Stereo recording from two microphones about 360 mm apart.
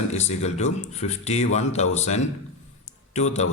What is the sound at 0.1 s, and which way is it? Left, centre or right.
A man's voice, centre.